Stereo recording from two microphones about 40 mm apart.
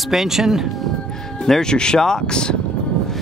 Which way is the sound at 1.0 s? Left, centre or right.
Centre.